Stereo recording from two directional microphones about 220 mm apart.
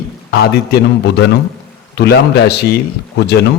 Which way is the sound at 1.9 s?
50° left (ahead or behind).